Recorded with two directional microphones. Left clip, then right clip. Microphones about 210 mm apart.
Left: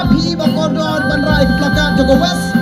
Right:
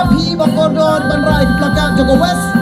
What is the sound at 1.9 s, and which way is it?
Music, 40° left (ahead or behind).